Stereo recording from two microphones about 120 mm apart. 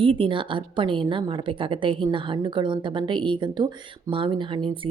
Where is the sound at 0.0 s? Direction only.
50° right (ahead or behind).